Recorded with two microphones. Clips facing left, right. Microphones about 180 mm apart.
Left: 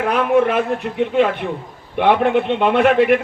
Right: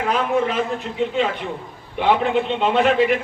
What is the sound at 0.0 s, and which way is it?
A man's voice, 60° left (ahead or behind).